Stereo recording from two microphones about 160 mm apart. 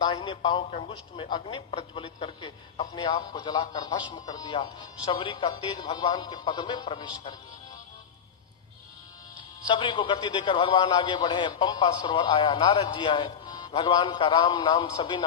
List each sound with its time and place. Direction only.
0.0 s a man's voice: 30° left (ahead or behind)
9.6 s a man's voice: 30° left (ahead or behind)